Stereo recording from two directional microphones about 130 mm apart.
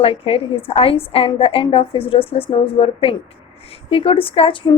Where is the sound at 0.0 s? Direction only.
45° left (ahead or behind).